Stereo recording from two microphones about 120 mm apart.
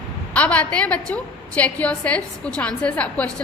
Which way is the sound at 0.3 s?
10° left (ahead or behind).